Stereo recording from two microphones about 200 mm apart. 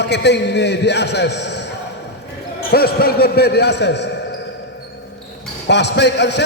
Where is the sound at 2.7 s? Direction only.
50° left (ahead or behind).